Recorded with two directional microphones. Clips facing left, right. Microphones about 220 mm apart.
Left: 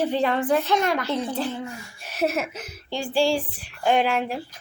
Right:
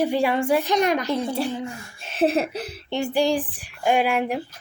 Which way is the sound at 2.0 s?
25° right (ahead or behind).